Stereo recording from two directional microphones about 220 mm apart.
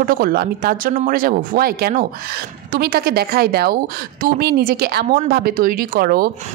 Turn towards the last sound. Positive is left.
turn(degrees=-40)  # may be behind; listen again after turning